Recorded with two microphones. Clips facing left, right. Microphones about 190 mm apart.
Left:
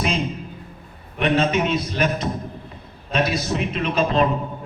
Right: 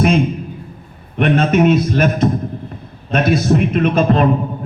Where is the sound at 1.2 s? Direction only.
50° right (ahead or behind).